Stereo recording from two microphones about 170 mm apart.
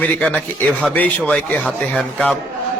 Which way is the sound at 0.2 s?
5° left (ahead or behind).